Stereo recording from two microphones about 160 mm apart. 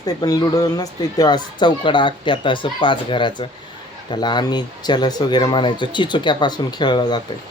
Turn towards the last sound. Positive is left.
turn(degrees=30)  # may be behind; listen again after turning